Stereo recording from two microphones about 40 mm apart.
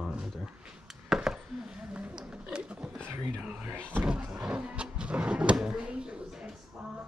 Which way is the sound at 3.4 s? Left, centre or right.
Right.